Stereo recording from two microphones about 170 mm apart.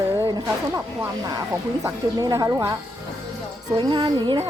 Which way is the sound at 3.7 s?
30° right (ahead or behind).